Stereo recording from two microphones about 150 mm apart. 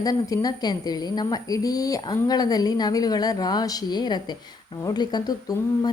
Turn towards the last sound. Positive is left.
turn(degrees=25)  # may be behind; listen again after turning